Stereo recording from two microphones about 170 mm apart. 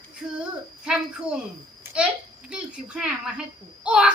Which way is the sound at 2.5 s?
5° right (ahead or behind).